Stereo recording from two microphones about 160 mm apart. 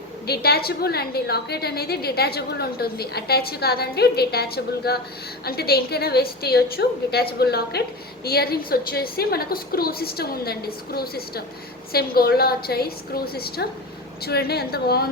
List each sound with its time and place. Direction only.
0.3 s a woman's voice: 75° left (ahead or behind)